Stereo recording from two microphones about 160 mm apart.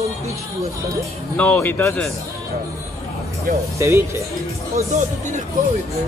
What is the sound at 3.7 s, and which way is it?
Speech, 15° right (ahead or behind).